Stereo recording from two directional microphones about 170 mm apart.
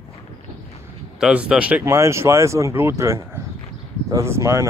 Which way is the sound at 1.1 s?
5° right (ahead or behind).